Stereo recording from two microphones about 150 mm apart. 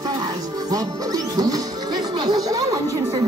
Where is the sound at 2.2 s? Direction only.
25° right (ahead or behind).